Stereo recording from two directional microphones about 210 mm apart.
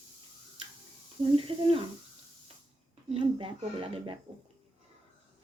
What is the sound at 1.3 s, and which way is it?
Speech, 25° right (ahead or behind).